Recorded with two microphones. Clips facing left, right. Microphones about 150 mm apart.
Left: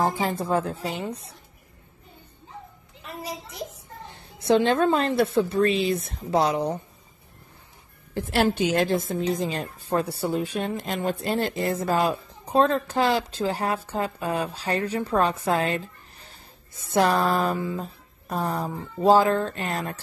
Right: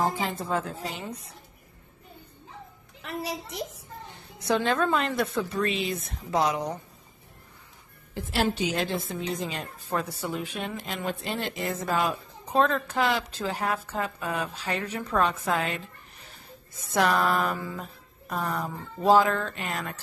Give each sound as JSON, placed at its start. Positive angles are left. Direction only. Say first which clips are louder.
{"t": 0.0, "sound": "a woman's voice", "louder": "left 3 dB", "side_deg": 35}
{"t": 3.0, "sound": "a child's voice", "louder": "right 2 dB", "side_deg": -80}
{"t": 4.4, "sound": "a woman's voice", "louder": "left 5 dB", "side_deg": 25}
{"t": 8.1, "sound": "a woman's voice", "louder": "left 4 dB", "side_deg": 60}
{"t": 17.6, "sound": "speech", "louder": "left 6 dB", "side_deg": 20}
{"t": 18.3, "sound": "a woman's voice", "louder": "left 3 dB", "side_deg": 30}